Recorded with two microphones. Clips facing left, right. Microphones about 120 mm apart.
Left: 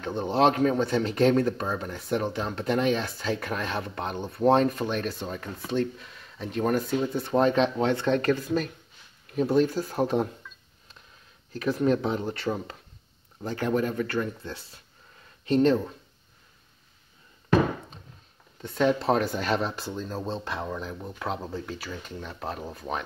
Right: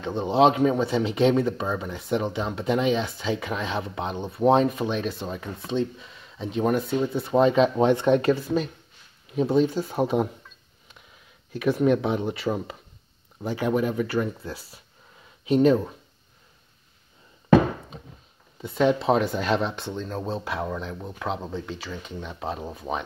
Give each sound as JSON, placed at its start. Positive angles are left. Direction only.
{"t": 0.0, "sound": "speech", "side_deg": 0}
{"t": 7.7, "sound": "speech", "side_deg": -20}
{"t": 8.4, "sound": "speech", "side_deg": 0}
{"t": 11.5, "sound": "speech", "side_deg": -5}
{"t": 18.6, "sound": "speech", "side_deg": -5}